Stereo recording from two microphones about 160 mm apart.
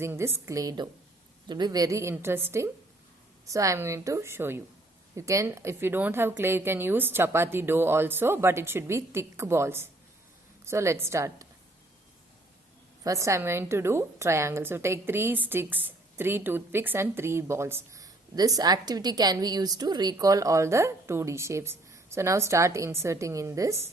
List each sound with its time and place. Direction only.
0.0 s a woman's voice: 15° right (ahead or behind)
13.1 s a woman's voice: 20° right (ahead or behind)